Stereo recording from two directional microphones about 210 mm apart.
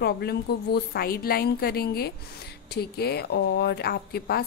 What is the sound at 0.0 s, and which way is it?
A woman's voice, 50° left (ahead or behind).